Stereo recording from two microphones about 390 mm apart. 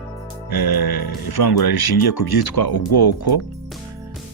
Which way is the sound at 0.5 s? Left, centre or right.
Left.